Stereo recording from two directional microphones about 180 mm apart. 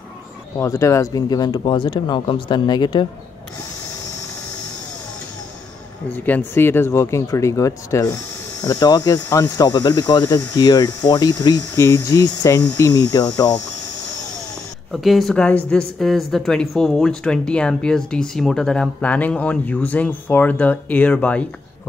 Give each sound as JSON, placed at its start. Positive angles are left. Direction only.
{"t": 0.6, "sound": "speech", "side_deg": 15}
{"t": 6.1, "sound": "speech", "side_deg": 10}
{"t": 14.9, "sound": "a woman's voice", "side_deg": 0}